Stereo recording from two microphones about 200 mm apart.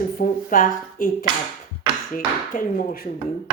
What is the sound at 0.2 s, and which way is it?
Speech, 45° left (ahead or behind).